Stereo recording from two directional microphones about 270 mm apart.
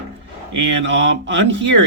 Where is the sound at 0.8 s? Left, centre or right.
Right.